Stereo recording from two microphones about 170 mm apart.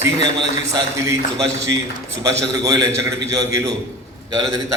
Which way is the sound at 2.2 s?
20° right (ahead or behind).